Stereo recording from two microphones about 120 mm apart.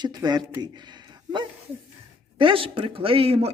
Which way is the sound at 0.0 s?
35° right (ahead or behind).